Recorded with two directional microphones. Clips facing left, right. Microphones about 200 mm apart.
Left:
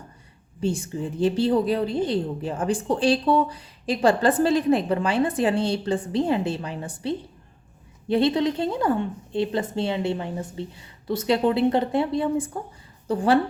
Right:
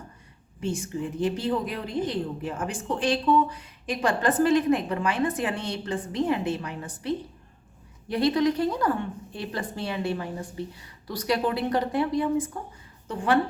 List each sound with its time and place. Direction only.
0.6 s a woman's voice: 30° left (ahead or behind)